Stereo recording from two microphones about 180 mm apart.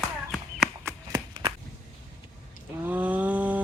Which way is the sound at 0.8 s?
25° right (ahead or behind).